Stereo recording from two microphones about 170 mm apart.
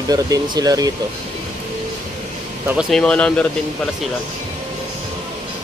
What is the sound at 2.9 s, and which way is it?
Speech, 5° left (ahead or behind).